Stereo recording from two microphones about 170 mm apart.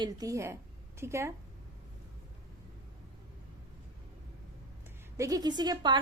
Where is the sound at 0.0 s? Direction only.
20° right (ahead or behind).